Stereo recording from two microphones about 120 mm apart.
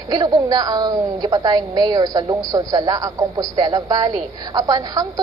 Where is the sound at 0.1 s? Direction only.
35° right (ahead or behind).